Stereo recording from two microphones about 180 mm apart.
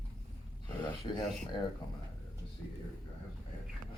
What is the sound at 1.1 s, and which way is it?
Speech, 25° left (ahead or behind).